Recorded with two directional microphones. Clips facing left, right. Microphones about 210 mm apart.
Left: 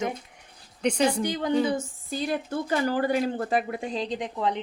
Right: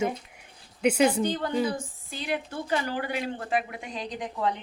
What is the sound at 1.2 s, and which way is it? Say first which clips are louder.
Speech: left 1 dB; 15° left (ahead or behind).